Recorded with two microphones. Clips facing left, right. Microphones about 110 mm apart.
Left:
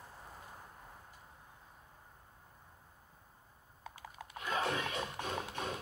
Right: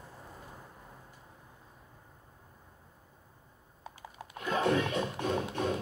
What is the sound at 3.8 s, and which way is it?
Typing, 30° right (ahead or behind).